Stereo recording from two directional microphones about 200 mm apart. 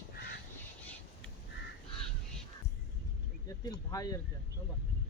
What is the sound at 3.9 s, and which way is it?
Speech, 20° left (ahead or behind).